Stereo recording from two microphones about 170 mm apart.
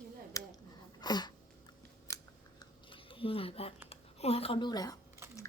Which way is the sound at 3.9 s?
35° left (ahead or behind).